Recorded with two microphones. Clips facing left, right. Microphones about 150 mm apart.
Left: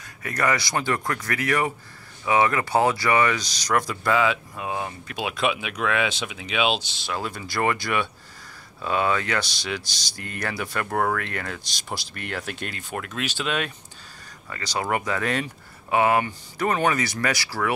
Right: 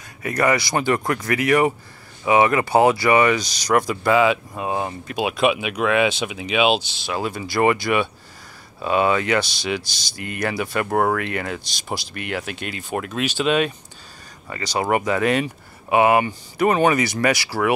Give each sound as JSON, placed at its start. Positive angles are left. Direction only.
{"t": 0.2, "sound": "speech", "side_deg": -10}
{"t": 4.6, "sound": "speech", "side_deg": -30}
{"t": 5.1, "sound": "speech", "side_deg": -15}